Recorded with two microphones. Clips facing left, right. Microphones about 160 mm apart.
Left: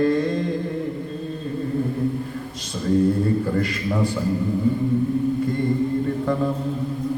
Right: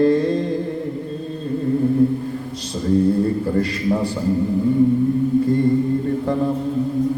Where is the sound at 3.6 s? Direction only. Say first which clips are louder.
Right 3 dB; 35° right (ahead or behind).